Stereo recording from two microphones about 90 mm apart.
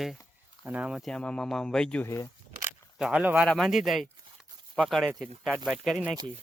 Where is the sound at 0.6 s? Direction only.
15° right (ahead or behind).